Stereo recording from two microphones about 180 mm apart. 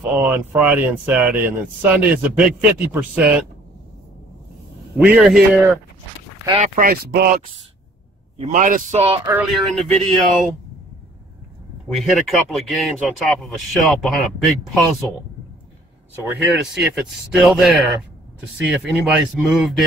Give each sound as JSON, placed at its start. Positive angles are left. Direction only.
{"t": 0.2, "sound": "speech", "side_deg": -10}
{"t": 4.9, "sound": "speech", "side_deg": -5}
{"t": 6.6, "sound": "speech", "side_deg": -50}
{"t": 8.4, "sound": "a man's voice", "side_deg": -40}
{"t": 9.2, "sound": "speech", "side_deg": -10}
{"t": 9.5, "sound": "speech", "side_deg": 0}
{"t": 11.9, "sound": "speech", "side_deg": 0}
{"t": 16.7, "sound": "speech", "side_deg": -5}